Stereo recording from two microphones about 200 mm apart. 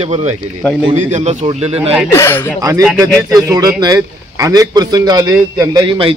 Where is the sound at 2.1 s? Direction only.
10° left (ahead or behind).